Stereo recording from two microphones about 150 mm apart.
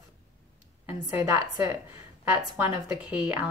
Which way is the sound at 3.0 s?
10° right (ahead or behind).